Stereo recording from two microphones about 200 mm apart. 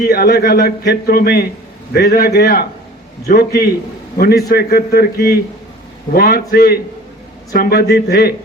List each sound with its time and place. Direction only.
0.1 s speech: 50° left (ahead or behind)